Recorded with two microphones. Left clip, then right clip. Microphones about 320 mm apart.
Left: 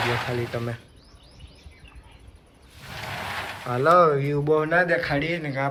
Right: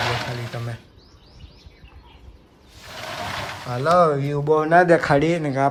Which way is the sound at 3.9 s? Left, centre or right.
Centre.